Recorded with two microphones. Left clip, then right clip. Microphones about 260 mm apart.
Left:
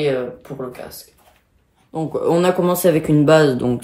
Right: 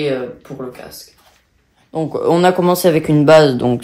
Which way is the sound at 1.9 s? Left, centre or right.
Right.